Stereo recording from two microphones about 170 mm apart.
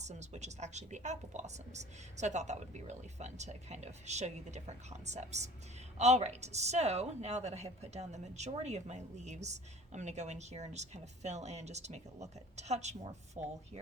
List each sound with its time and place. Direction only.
0.0 s a woman's voice: 40° right (ahead or behind)